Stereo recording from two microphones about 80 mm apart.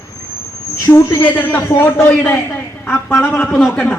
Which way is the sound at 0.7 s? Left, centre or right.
Left.